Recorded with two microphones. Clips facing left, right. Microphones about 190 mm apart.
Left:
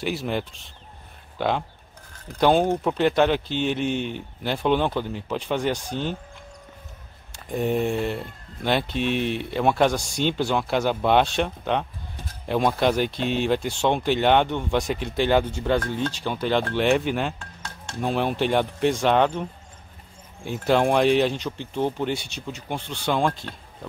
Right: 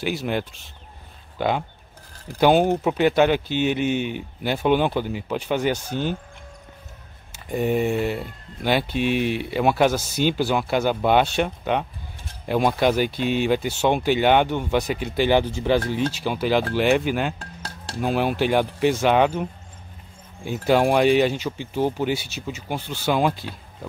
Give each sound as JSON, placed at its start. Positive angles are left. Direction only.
{"t": 0.0, "sound": "speech", "side_deg": 0}
{"t": 7.3, "sound": "speech", "side_deg": 0}
{"t": 17.4, "sound": "dishes", "side_deg": -35}
{"t": 17.9, "sound": "speech", "side_deg": -5}
{"t": 20.4, "sound": "speech", "side_deg": 0}